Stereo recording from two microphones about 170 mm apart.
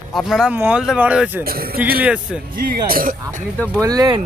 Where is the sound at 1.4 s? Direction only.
60° right (ahead or behind).